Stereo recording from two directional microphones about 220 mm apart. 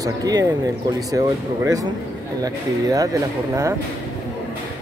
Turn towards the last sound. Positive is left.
turn(degrees=-15)  # may be behind; listen again after turning